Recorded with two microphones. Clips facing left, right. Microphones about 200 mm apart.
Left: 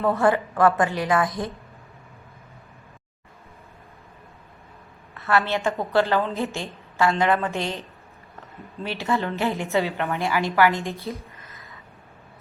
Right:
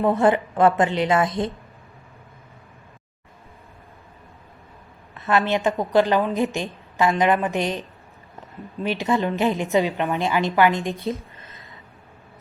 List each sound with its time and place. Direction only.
0.0 s a woman's voice: 20° right (ahead or behind)
5.1 s a woman's voice: 20° right (ahead or behind)